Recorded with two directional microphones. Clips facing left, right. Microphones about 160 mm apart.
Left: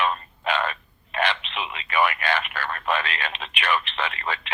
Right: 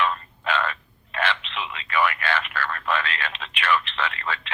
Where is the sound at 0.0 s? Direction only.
20° left (ahead or behind).